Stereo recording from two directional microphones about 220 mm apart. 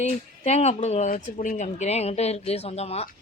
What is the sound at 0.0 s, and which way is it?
Speech, 30° left (ahead or behind).